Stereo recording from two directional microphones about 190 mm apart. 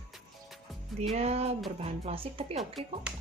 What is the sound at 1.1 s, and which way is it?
Speech, 35° right (ahead or behind).